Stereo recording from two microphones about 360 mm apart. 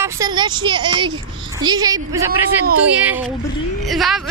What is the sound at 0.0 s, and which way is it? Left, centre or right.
A woman's voice, centre.